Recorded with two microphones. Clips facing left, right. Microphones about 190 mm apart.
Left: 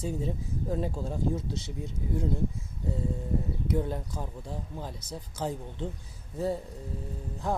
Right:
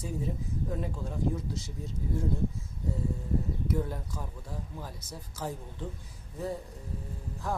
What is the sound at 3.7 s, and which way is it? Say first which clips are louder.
Speech: left 4 dB; 25° left (ahead or behind).